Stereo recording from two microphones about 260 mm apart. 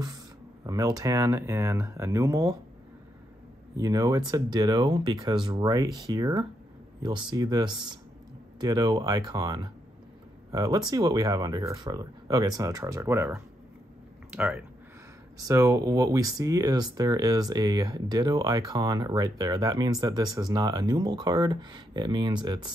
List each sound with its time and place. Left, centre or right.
0.7 s speech: centre
3.7 s speech: centre